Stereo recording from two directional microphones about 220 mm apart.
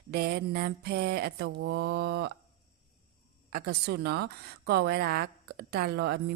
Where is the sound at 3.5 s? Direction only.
45° right (ahead or behind).